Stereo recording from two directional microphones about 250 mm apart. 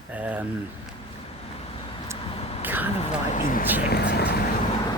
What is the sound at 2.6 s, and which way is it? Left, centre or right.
Speech, centre.